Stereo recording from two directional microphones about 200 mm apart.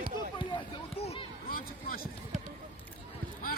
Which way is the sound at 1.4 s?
45° left (ahead or behind).